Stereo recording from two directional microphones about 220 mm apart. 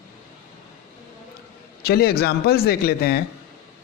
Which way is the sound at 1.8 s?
45° left (ahead or behind).